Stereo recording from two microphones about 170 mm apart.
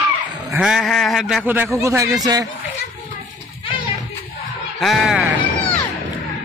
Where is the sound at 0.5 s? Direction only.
5° right (ahead or behind).